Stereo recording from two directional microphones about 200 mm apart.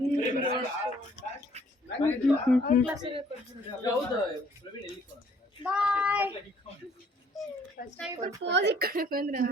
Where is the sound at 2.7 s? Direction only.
40° left (ahead or behind).